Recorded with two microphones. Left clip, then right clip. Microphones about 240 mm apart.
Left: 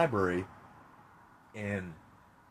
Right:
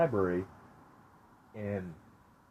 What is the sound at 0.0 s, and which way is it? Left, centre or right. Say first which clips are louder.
Speech: even; left.